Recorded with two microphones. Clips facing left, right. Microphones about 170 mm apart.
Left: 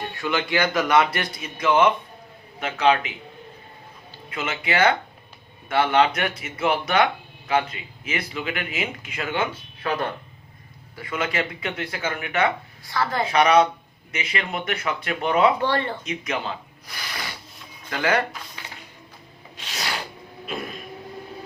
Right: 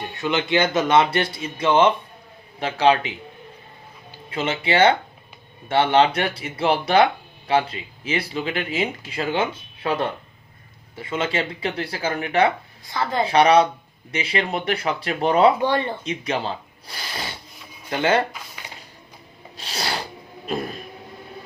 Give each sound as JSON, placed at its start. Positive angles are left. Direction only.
{"t": 0.1, "sound": "speech", "side_deg": -20}
{"t": 4.3, "sound": "speech", "side_deg": -30}
{"t": 12.9, "sound": "speech", "side_deg": -20}
{"t": 13.2, "sound": "speech", "side_deg": -30}
{"t": 15.5, "sound": "speech", "side_deg": -15}
{"t": 16.0, "sound": "speech", "side_deg": -30}
{"t": 19.5, "sound": "filing", "side_deg": -35}
{"t": 20.5, "sound": "vehicle", "side_deg": -35}